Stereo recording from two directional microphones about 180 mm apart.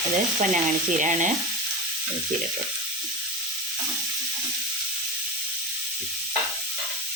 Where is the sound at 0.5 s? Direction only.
45° right (ahead or behind).